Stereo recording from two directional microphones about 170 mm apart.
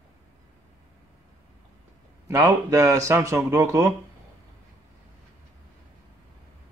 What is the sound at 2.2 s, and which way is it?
Speech, 20° right (ahead or behind).